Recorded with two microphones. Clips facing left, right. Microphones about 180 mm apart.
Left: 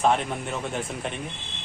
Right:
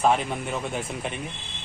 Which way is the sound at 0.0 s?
Centre (ahead or behind).